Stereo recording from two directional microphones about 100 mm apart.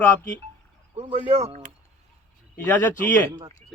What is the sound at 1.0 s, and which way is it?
Speech, 90° right.